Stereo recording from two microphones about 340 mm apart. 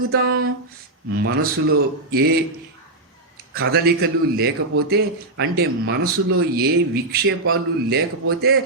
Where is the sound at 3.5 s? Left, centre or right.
Right.